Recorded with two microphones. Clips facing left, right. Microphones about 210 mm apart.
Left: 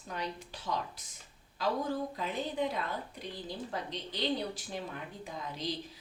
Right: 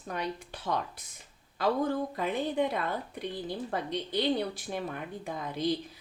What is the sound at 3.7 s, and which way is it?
A woman's voice, 55° right (ahead or behind).